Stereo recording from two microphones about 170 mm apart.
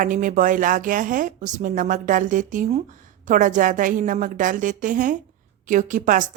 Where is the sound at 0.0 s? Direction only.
50° right (ahead or behind).